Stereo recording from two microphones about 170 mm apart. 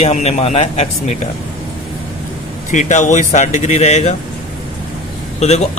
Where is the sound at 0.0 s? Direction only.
40° left (ahead or behind).